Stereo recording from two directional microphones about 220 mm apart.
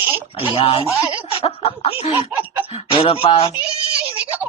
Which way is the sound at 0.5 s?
25° left (ahead or behind).